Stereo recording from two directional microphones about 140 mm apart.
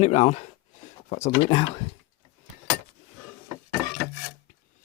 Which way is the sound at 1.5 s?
40° left (ahead or behind).